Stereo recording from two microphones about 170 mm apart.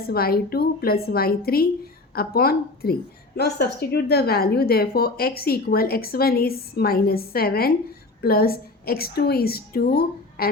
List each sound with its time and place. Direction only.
0.0 s a woman's voice: 65° left (ahead or behind)